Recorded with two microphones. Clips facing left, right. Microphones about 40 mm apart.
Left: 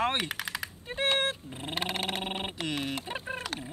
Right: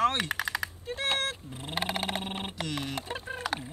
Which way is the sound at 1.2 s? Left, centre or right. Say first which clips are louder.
Left 2 dB; left.